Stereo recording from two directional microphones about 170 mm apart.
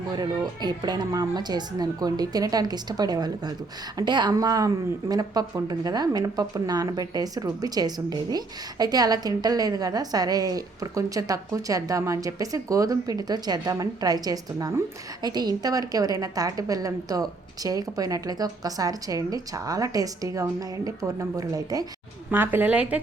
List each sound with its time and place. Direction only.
0.2 s a woman's voice: 25° right (ahead or behind); by 23.0 s 10° right (ahead or behind)